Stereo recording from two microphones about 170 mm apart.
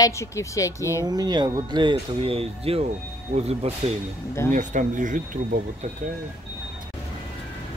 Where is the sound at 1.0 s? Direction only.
25° right (ahead or behind).